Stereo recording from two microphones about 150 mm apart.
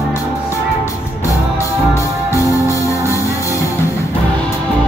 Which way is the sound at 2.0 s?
20° left (ahead or behind).